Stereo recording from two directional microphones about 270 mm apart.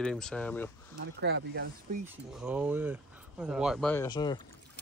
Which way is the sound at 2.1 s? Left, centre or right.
Centre.